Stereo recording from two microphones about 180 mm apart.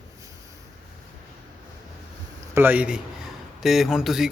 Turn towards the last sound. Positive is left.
turn(degrees=0)  # may be behind; listen again after turning